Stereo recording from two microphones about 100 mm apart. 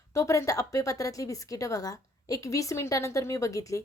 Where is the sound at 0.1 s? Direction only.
30° left (ahead or behind).